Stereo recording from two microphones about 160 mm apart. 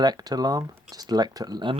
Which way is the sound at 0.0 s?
25° right (ahead or behind).